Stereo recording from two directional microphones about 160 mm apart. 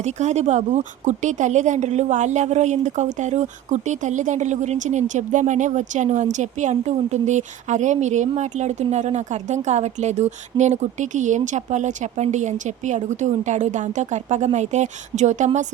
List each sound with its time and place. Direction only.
0.0 s a woman's voice: 45° right (ahead or behind)